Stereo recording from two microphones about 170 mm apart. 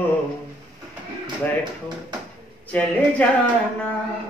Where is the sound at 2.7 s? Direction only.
10° left (ahead or behind).